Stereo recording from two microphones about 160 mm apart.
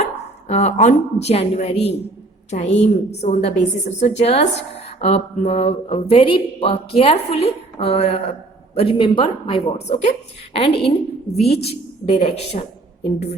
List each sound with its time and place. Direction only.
0.4 s a woman's voice: 45° left (ahead or behind)
9.8 s a woman's voice: 45° left (ahead or behind)